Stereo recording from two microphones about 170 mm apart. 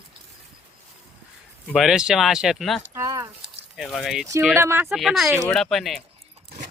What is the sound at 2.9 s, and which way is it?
Speech, 20° right (ahead or behind).